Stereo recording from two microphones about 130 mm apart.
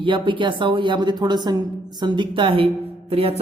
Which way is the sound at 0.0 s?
40° right (ahead or behind).